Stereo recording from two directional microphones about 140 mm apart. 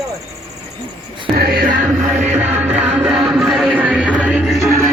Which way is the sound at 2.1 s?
10° right (ahead or behind).